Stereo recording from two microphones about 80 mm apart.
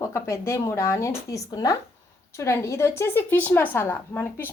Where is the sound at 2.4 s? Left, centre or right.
Left.